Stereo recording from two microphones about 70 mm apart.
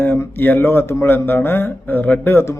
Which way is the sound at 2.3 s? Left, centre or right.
Left.